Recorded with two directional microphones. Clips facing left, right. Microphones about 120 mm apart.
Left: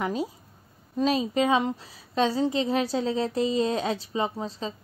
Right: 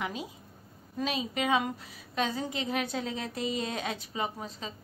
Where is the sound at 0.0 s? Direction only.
40° left (ahead or behind).